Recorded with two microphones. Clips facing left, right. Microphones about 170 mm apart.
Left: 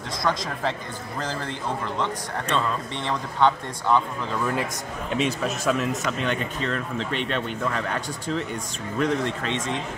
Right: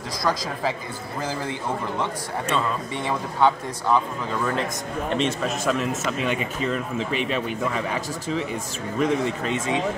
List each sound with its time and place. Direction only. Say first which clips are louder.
0.2 s a man's voice: right 1 dB; centre (ahead or behind)
2.0 s speech: right 1 dB; 10° right (ahead or behind)
5.1 s a man's voice: even; centre (ahead or behind)